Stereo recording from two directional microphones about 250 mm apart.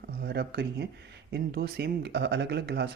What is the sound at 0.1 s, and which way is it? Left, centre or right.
Speech, right.